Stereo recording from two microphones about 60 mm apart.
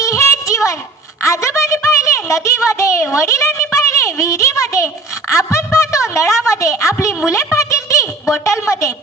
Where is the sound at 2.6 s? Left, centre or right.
Left.